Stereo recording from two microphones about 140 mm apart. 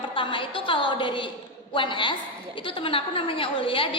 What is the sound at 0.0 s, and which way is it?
A woman's voice, 35° left (ahead or behind).